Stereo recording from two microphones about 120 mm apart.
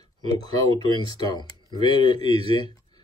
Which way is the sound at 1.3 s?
40° left (ahead or behind).